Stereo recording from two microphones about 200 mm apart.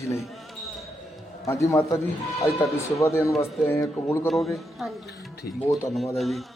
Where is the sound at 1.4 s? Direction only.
15° left (ahead or behind).